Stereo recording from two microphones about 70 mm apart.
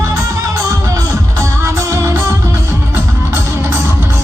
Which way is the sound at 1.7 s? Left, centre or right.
Right.